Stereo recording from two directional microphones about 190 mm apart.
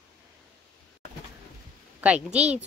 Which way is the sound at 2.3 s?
35° right (ahead or behind).